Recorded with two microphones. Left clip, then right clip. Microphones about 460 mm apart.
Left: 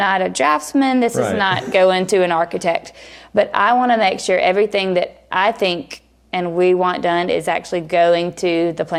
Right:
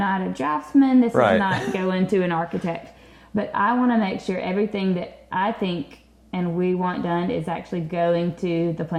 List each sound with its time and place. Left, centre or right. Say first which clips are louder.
0.0 s a woman's voice: left 9 dB; left
1.1 s a woman's voice: right 2 dB; right
1.4 s a woman's voice: left 9 dB; left
3.3 s a woman's voice: left 8 dB; left
6.8 s a woman's voice: left 8 dB; left